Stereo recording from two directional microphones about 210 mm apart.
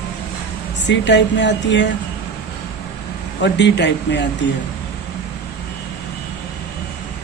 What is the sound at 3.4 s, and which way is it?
Speech, 55° left (ahead or behind).